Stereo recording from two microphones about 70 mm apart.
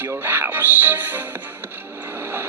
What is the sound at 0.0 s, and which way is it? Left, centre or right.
Speech, right.